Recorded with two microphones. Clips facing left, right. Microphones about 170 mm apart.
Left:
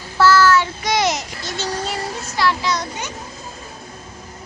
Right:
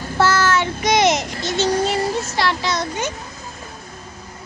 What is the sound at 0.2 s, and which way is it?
Child singing, 20° right (ahead or behind).